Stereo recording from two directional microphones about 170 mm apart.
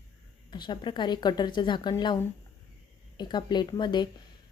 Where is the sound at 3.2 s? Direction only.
25° left (ahead or behind).